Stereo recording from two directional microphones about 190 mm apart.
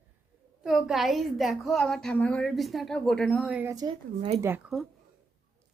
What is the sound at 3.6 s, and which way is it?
Speech, 20° right (ahead or behind).